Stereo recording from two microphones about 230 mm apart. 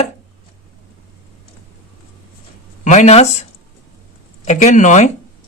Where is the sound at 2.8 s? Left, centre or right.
Left.